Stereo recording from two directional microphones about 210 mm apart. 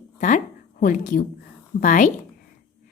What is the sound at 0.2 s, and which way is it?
A woman's voice, 35° left (ahead or behind).